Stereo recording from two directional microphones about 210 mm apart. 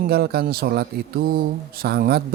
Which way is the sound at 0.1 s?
50° right (ahead or behind).